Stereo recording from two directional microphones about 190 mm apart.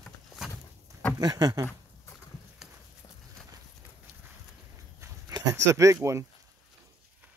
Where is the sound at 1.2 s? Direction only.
20° right (ahead or behind).